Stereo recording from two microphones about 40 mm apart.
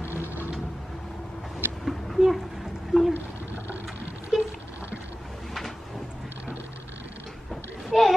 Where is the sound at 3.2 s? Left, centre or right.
Left.